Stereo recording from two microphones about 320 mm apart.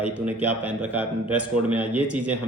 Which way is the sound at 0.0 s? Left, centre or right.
Centre.